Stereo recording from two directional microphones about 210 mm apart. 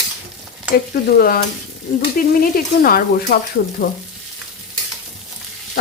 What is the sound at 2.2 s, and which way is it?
Stir, 40° left (ahead or behind).